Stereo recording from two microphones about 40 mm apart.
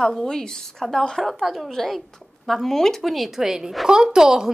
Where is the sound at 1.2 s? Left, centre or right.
Centre.